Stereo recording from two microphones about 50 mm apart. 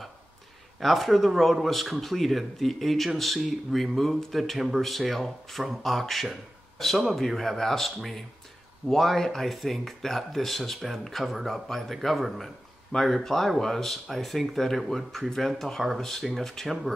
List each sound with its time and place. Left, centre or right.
0.7 s speech: centre